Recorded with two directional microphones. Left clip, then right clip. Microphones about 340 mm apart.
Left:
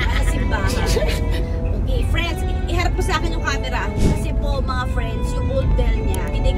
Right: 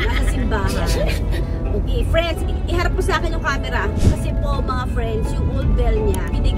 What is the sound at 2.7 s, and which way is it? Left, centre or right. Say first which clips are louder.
Music: right 2 dB; right.